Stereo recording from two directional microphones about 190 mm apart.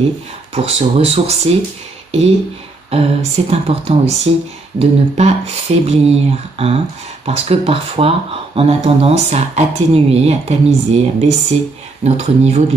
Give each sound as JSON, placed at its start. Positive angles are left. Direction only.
{"t": 0.6, "sound": "speech", "side_deg": -30}
{"t": 2.9, "sound": "speech", "side_deg": -30}